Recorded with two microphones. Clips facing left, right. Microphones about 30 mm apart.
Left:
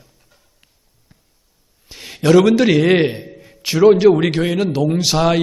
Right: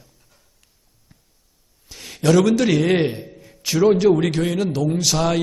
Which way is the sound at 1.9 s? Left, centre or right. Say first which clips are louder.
Left 4 dB; left.